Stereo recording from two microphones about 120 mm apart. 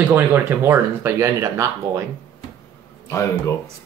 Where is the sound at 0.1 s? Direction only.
15° right (ahead or behind).